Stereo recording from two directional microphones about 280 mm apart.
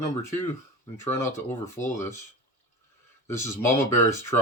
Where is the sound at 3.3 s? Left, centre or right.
Centre.